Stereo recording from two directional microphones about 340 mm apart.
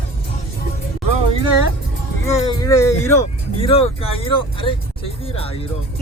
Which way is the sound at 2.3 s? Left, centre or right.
Centre.